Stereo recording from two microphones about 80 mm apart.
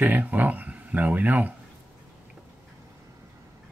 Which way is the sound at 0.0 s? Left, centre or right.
Right.